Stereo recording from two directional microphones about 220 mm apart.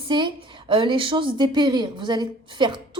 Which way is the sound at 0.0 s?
20° right (ahead or behind).